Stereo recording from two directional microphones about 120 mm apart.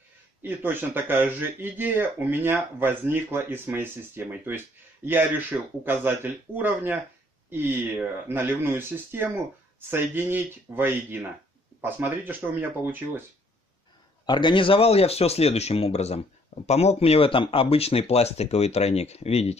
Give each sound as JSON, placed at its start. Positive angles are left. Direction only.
{"t": 0.4, "sound": "speech", "side_deg": -15}
{"t": 14.2, "sound": "speech", "side_deg": 40}